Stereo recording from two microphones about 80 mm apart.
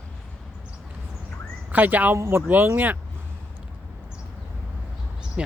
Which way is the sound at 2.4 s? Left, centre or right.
Right.